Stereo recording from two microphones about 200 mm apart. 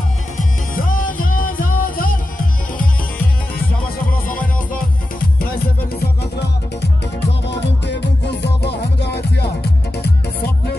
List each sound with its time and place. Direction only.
0.4 s music: 45° left (ahead or behind)
7.2 s music: 60° left (ahead or behind)